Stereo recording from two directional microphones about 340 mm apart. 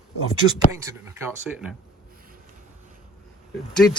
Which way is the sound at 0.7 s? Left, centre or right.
Centre.